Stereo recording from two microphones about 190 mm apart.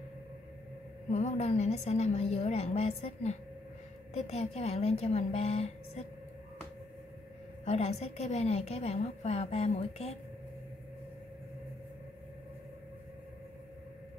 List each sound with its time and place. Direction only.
1.1 s a woman's voice: 35° left (ahead or behind)
7.6 s a woman's voice: 35° left (ahead or behind)